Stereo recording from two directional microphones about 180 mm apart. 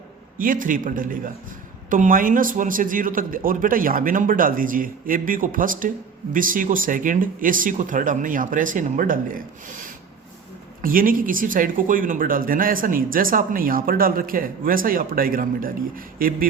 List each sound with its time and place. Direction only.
0.3 s speech: 50° right (ahead or behind)